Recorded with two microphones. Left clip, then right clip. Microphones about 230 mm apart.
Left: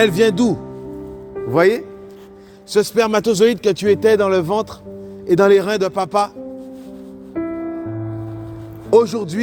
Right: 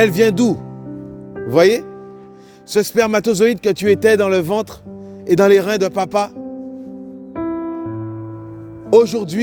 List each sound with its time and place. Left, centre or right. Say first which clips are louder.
0.0 s speech: right 1 dB; right
8.9 s speech: right 2 dB; right